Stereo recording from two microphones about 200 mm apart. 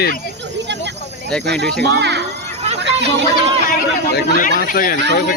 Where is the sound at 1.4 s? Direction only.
55° right (ahead or behind).